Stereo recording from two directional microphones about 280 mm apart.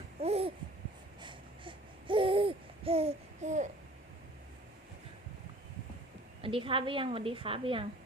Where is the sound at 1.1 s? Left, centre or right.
Centre.